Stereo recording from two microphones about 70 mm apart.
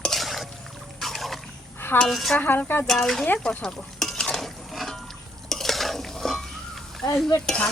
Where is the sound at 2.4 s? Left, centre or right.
Left.